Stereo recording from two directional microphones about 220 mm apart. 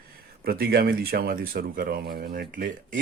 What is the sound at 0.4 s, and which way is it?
Speech, 45° right (ahead or behind).